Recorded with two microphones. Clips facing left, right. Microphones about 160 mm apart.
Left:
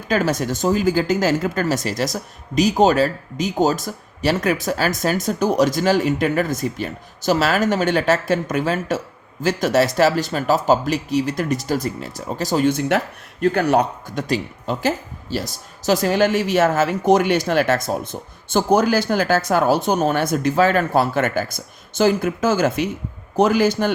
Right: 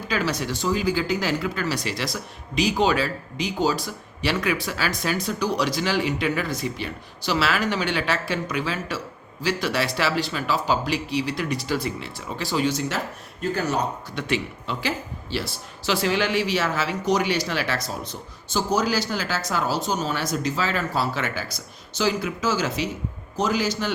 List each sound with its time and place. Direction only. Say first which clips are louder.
0.1 s a man's voice: left 6 dB; 45° left (ahead or behind); by 13.8 s 60° left (ahead or behind)
14.2 s a man's voice: left 4 dB; 40° left (ahead or behind)